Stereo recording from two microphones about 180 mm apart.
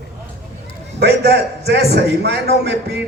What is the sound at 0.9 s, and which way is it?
A man's voice, 65° right (ahead or behind).